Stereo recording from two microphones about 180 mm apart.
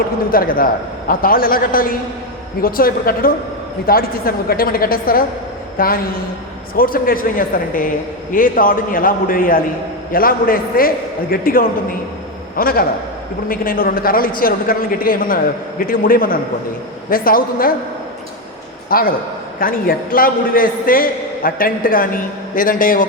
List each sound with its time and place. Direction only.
0.3 s a man's voice: 50° left (ahead or behind)
18.9 s a man's voice: 55° left (ahead or behind)